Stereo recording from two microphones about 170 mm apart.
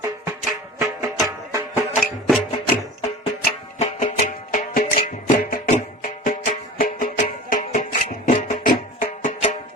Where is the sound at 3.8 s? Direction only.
45° left (ahead or behind).